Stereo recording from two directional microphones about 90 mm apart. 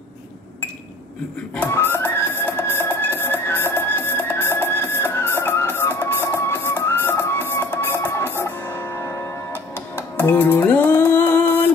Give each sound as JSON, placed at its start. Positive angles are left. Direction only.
{"t": 1.6, "sound": "music", "side_deg": 25}